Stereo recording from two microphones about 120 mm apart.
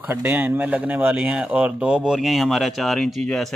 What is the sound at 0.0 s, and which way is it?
A man's voice, 15° right (ahead or behind).